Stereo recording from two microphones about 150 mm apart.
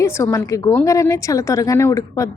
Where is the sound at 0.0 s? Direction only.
20° left (ahead or behind).